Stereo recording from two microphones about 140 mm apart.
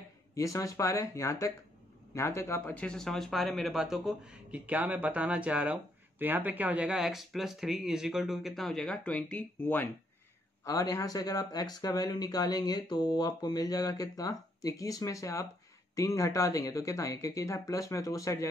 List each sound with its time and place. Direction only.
0.4 s speech: 20° left (ahead or behind)
10.6 s speech: 20° left (ahead or behind)